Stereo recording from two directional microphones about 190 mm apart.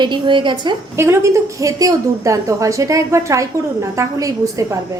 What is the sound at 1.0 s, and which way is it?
A woman's voice, 15° right (ahead or behind).